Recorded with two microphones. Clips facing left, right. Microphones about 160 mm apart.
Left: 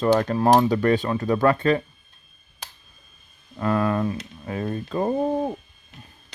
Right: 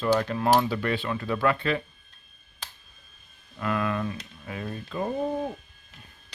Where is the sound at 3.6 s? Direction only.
35° left (ahead or behind).